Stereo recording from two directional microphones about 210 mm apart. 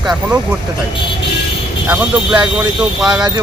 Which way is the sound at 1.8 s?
5° right (ahead or behind).